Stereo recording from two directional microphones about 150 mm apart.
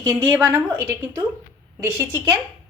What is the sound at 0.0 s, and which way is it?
A woman's voice, 20° right (ahead or behind).